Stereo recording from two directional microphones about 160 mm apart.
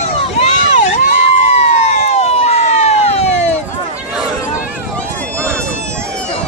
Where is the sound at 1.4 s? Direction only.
45° left (ahead or behind).